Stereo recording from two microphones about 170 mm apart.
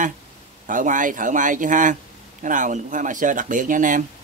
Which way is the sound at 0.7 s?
50° right (ahead or behind).